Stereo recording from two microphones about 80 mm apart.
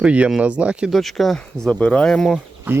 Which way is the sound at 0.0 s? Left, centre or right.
Centre.